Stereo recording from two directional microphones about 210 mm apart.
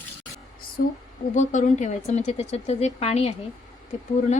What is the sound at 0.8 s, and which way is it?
Speech, 40° left (ahead or behind).